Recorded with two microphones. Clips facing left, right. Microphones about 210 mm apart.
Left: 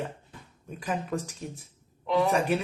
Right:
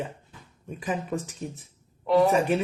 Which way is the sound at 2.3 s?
Centre (ahead or behind).